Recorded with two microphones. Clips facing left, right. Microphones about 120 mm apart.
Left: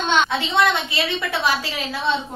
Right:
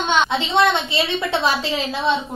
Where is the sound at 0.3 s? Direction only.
25° right (ahead or behind).